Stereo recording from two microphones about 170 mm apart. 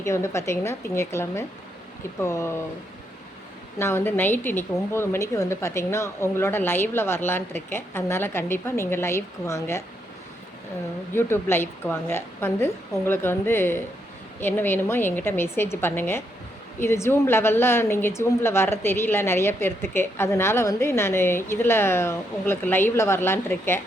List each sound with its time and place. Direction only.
0.0 s a woman's voice: 15° left (ahead or behind)
3.8 s a woman's voice: 15° left (ahead or behind)
11.1 s a woman's voice: 15° left (ahead or behind)